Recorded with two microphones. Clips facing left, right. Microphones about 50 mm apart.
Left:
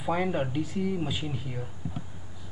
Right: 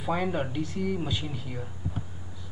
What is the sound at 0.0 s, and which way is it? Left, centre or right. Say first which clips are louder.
Speech: left 1 dB; centre.